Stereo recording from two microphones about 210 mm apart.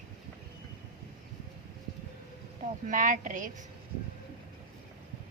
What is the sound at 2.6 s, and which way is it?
Speech, 40° right (ahead or behind).